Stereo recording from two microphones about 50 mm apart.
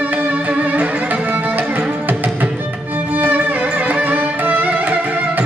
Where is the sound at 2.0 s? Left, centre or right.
Right.